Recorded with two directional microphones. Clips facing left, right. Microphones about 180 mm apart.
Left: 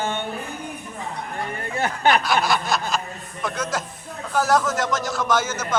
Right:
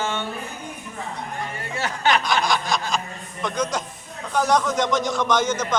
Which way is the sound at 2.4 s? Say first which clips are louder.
Left 1 dB; 5° left (ahead or behind).